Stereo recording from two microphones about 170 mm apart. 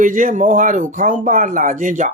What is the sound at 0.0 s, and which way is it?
Speech, 50° right (ahead or behind).